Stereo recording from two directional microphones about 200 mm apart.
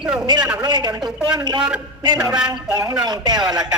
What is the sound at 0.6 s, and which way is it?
A woman's voice, 20° right (ahead or behind).